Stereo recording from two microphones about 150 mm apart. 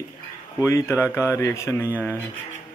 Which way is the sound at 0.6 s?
20° left (ahead or behind).